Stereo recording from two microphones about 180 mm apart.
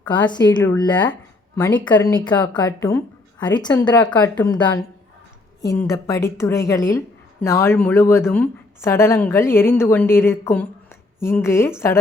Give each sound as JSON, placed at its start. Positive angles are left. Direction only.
{"t": 0.0, "sound": "a woman's voice", "side_deg": 10}
{"t": 4.2, "sound": "speech", "side_deg": 10}